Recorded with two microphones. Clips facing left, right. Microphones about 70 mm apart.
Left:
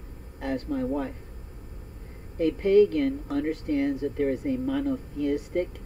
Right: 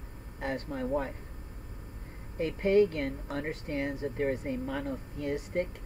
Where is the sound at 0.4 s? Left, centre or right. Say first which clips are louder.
Left 4 dB; right.